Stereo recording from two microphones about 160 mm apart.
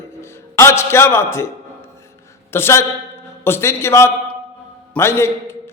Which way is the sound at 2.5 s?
15° left (ahead or behind).